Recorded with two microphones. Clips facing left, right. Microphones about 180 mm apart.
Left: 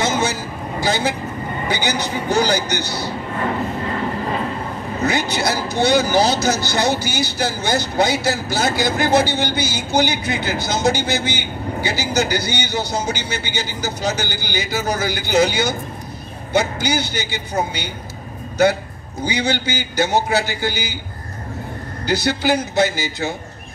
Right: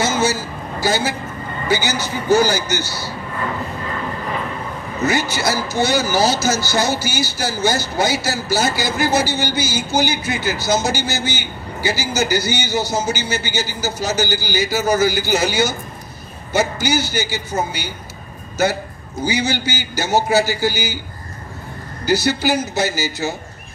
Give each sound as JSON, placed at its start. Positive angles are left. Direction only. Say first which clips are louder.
{"t": 0.0, "sound": "a sound", "louder": "right 1 dB", "side_deg": -5}
{"t": 1.7, "sound": "speech", "louder": "right 2 dB", "side_deg": -5}
{"t": 3.3, "sound": "a sound", "louder": "left 3 dB", "side_deg": 30}
{"t": 5.0, "sound": "speech", "louder": "right 1 dB", "side_deg": -5}
{"t": 19.2, "sound": "speech", "louder": "even", "side_deg": -5}
{"t": 22.0, "sound": "speech", "louder": "right 1 dB", "side_deg": -5}